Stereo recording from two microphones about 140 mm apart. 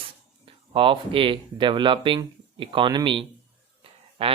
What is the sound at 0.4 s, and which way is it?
Speech, 40° right (ahead or behind).